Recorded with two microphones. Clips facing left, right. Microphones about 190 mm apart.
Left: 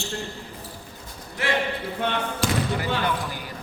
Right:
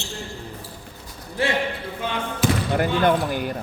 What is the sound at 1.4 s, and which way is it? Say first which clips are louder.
Speech: right 3 dB; 30° right (ahead or behind).